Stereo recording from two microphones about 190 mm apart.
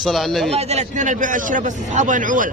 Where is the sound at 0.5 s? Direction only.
40° right (ahead or behind).